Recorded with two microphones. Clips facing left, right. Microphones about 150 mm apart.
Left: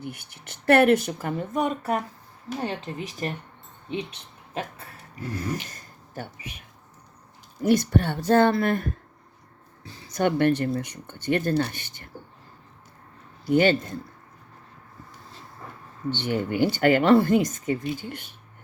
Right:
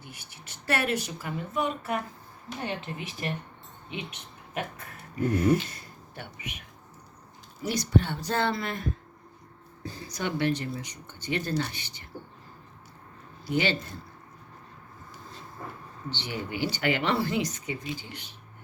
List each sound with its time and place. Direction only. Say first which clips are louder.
0.0 s speech: left 10 dB; 55° left (ahead or behind); by 6.7 s 30° left (ahead or behind)
7.6 s speech: left 5 dB; 50° left (ahead or behind)
10.1 s speech: left 7 dB; 50° left (ahead or behind)
13.4 s speech: left 8 dB; 50° left (ahead or behind)
16.0 s speech: left 9 dB; 50° left (ahead or behind)